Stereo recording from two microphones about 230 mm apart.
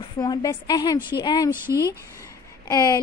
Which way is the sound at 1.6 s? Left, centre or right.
Centre.